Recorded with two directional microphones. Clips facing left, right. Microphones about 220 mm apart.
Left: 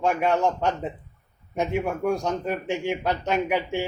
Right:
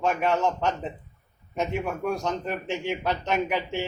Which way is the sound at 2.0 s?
15° left (ahead or behind).